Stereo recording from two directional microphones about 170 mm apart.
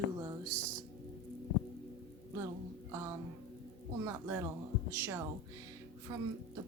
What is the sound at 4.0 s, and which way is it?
A woman's voice, 15° right (ahead or behind).